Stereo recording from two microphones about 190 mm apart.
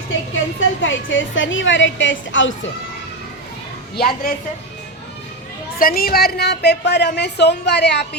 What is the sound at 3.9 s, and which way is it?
Speech, 55° left (ahead or behind).